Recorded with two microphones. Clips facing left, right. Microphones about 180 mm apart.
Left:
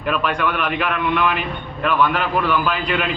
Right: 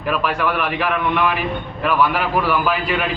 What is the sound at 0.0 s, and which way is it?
A man's voice, 5° right (ahead or behind).